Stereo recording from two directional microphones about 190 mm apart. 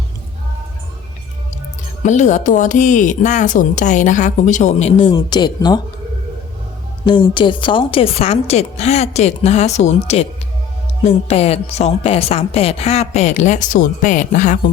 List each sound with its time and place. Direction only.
2.0 s speech: 40° left (ahead or behind); by 5.8 s 20° left (ahead or behind)
7.0 s speech: 25° left (ahead or behind); by 14.6 s 40° left (ahead or behind)